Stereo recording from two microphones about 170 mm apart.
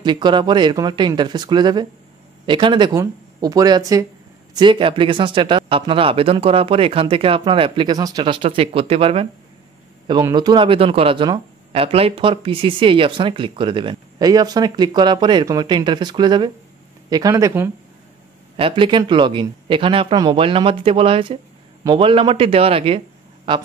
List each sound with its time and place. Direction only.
0.0 s speech: 25° right (ahead or behind)
18.6 s a man's voice: 30° right (ahead or behind)